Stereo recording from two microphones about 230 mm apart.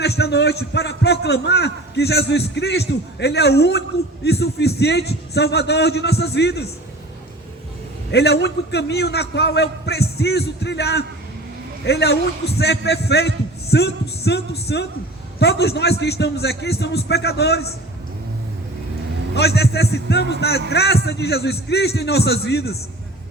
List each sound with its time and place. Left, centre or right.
0.0 s a man's voice: left
8.1 s a man's voice: left
19.4 s a man's voice: left